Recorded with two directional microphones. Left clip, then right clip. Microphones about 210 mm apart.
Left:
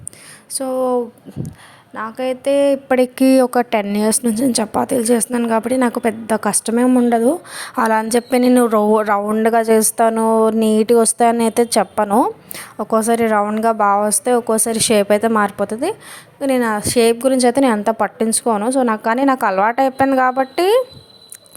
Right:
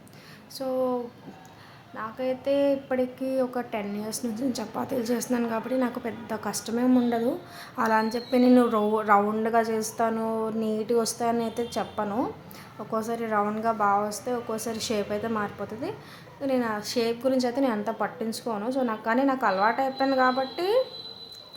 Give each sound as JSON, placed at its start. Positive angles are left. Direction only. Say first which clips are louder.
{"t": 0.5, "sound": "a woman's voice", "louder": "left 9 dB", "side_deg": 40}
{"t": 2.0, "sound": "a woman's voice", "louder": "left 9 dB", "side_deg": 40}